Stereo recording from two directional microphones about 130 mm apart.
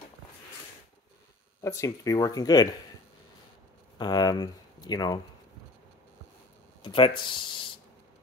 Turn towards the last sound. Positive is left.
turn(degrees=40)  # may be behind; listen again after turning